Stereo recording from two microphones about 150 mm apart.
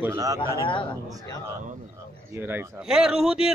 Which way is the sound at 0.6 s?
35° left (ahead or behind).